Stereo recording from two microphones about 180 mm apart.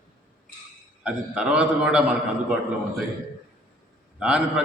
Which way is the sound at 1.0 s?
5° right (ahead or behind).